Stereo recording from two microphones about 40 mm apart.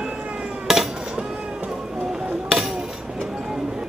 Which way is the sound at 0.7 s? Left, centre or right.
Centre.